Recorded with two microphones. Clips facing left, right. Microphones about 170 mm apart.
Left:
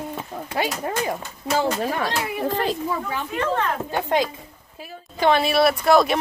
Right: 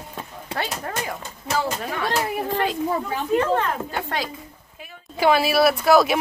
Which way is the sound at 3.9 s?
20° left (ahead or behind).